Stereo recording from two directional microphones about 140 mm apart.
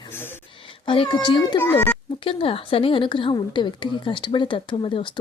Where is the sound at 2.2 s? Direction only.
40° left (ahead or behind).